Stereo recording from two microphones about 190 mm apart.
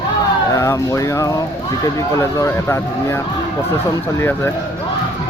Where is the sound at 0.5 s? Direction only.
15° left (ahead or behind).